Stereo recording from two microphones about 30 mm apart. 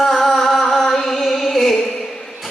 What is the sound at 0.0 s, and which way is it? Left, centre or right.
Music, centre.